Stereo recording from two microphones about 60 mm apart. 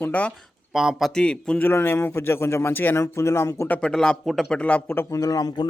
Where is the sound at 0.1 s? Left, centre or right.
Left.